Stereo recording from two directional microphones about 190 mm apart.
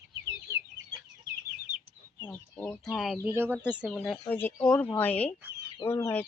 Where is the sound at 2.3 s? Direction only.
10° left (ahead or behind).